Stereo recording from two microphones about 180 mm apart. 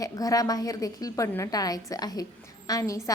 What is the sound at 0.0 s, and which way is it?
A woman's voice, 20° left (ahead or behind).